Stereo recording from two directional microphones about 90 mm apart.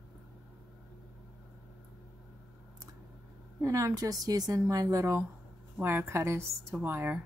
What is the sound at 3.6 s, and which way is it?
A woman's voice, 35° right (ahead or behind).